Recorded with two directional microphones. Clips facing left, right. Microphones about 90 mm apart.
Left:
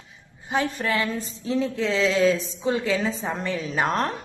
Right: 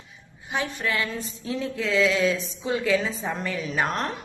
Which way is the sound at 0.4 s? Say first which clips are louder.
Left 3 dB; 40° left (ahead or behind).